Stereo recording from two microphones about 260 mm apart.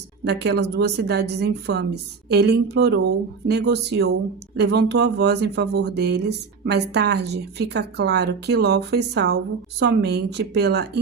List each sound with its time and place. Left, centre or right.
0.3 s speech: right